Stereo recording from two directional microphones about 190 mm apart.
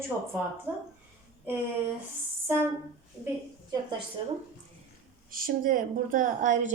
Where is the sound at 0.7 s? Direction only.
10° right (ahead or behind).